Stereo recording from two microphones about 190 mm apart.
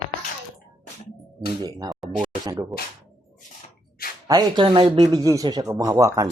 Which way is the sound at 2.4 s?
20° right (ahead or behind).